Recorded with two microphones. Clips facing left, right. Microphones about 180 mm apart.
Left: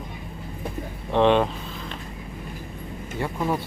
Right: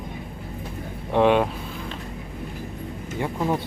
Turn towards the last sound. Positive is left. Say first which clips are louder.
# right 1 dB
turn(degrees=-15)  # may be behind; listen again after turning